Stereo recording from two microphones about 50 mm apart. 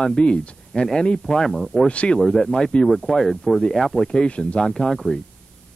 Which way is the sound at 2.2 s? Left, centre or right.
Centre.